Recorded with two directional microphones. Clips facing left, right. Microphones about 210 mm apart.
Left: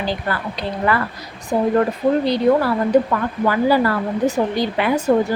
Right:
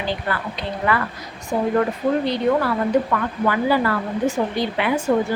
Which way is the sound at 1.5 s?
35° left (ahead or behind).